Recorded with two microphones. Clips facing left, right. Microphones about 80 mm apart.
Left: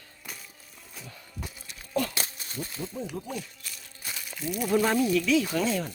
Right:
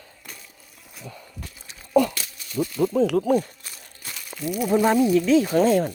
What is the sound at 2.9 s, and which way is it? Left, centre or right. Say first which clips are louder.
Speech: right 16 dB; right.